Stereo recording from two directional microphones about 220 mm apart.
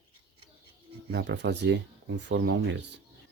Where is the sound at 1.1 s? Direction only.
50° right (ahead or behind).